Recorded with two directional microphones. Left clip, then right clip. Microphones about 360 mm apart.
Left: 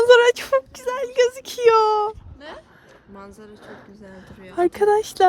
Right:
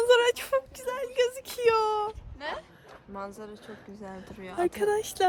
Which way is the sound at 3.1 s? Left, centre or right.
Centre.